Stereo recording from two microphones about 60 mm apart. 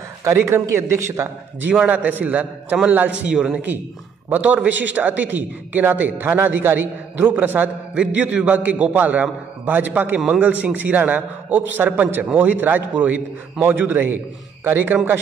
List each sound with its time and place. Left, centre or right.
0.4 s a man's voice: right
1.7 s a man's voice: right
4.3 s a man's voice: right
7.9 s a man's voice: centre; by 15.0 s right